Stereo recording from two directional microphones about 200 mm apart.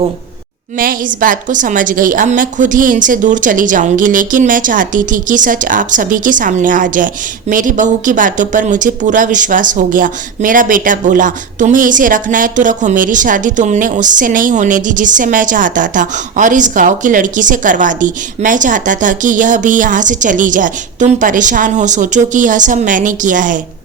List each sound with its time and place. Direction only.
0.8 s speech: 45° right (ahead or behind)